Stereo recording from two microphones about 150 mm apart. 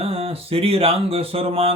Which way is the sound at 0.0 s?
40° right (ahead or behind).